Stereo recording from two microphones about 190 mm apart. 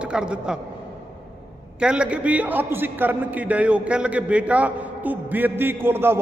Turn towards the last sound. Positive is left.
turn(degrees=-10)  # may be behind; listen again after turning